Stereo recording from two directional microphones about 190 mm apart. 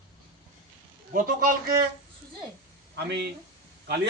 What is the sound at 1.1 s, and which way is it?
Speech, 45° right (ahead or behind).